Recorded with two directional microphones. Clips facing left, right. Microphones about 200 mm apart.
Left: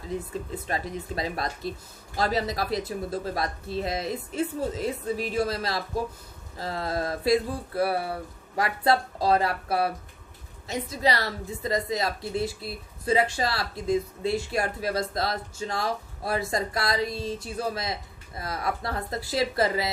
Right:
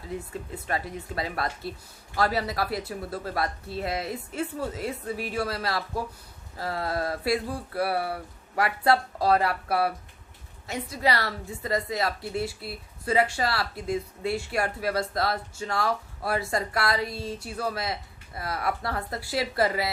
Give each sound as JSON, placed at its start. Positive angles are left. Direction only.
{"t": 0.1, "sound": "a woman's voice", "side_deg": 20}